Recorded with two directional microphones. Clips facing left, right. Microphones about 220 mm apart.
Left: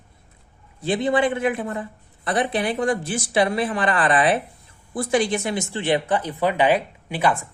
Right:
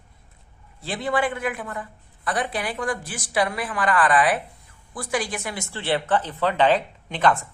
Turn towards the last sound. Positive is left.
turn(degrees=10)  # may be behind; listen again after turning